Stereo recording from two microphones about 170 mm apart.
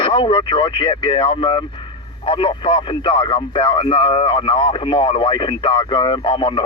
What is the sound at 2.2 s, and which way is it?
Speech, 30° left (ahead or behind).